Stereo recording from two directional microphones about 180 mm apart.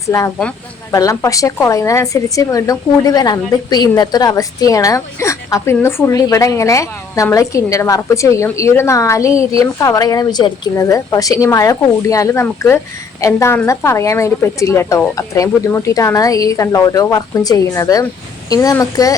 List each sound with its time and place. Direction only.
0.9 s a woman's voice: 20° left (ahead or behind)